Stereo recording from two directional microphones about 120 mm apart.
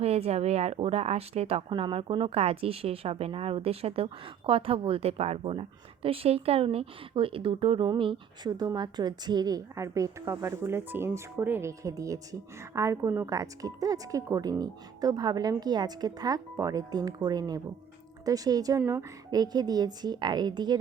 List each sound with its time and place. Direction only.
0.0 s a woman's voice: 55° right (ahead or behind); by 18.8 s 30° right (ahead or behind)
18.8 s a woman's voice: 20° right (ahead or behind)
19.3 s a woman's voice: 35° right (ahead or behind)